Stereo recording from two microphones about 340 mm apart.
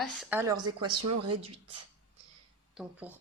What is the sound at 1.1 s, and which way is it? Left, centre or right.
Speech, right.